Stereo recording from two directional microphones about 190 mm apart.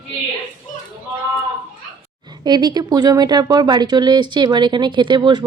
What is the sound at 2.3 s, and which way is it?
Speech, 20° right (ahead or behind).